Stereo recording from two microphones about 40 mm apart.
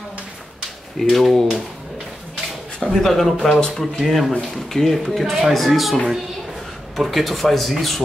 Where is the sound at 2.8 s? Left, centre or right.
Centre.